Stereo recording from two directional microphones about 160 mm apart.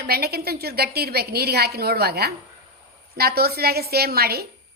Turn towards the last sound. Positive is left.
turn(degrees=-75)  # may be behind; listen again after turning